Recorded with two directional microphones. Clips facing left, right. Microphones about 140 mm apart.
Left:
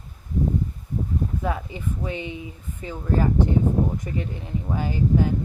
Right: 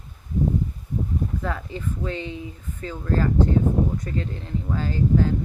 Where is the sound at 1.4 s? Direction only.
15° left (ahead or behind).